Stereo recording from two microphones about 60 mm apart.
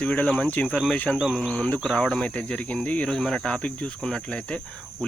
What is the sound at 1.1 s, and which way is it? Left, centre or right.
Speech, centre.